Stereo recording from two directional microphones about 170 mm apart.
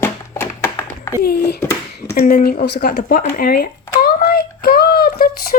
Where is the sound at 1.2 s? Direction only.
70° left (ahead or behind).